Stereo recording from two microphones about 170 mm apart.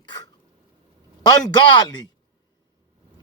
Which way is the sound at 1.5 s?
30° left (ahead or behind).